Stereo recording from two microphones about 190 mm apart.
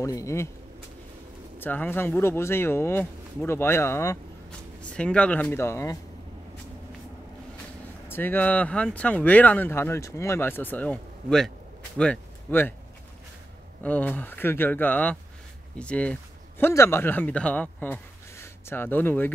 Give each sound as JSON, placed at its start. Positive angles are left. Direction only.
{"t": 0.0, "sound": "speech", "side_deg": 15}
{"t": 1.6, "sound": "speech", "side_deg": 10}
{"t": 8.1, "sound": "speech", "side_deg": 10}
{"t": 13.8, "sound": "speech", "side_deg": 10}